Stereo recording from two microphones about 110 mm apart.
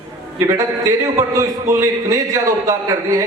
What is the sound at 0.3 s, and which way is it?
A man's voice, 25° right (ahead or behind).